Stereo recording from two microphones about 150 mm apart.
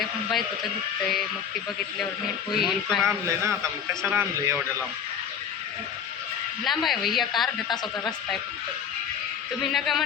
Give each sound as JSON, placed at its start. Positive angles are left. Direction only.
{"t": 0.0, "sound": "a man's voice", "side_deg": 0}
{"t": 2.5, "sound": "a woman's voice", "side_deg": 0}
{"t": 3.1, "sound": "a man's voice", "side_deg": -20}
{"t": 6.7, "sound": "a woman's voice", "side_deg": 0}
{"t": 9.7, "sound": "a woman's voice", "side_deg": 0}